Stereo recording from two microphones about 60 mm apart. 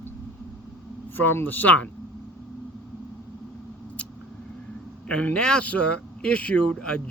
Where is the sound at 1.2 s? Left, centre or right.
Left.